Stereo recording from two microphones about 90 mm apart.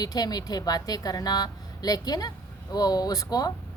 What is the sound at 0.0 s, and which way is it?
A woman's voice, 45° left (ahead or behind).